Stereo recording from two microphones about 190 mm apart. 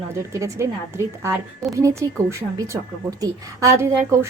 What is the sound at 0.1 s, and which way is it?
A woman's voice, 15° right (ahead or behind).